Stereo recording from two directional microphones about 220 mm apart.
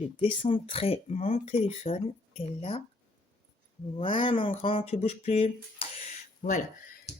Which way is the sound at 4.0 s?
25° left (ahead or behind).